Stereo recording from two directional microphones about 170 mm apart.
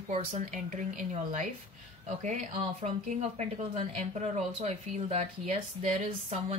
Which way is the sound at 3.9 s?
40° right (ahead or behind).